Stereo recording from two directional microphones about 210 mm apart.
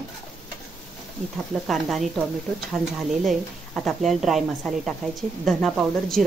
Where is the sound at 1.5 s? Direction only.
Centre (ahead or behind).